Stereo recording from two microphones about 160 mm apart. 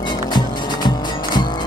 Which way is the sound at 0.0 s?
25° left (ahead or behind).